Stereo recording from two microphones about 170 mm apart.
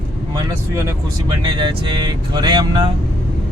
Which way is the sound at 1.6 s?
25° right (ahead or behind).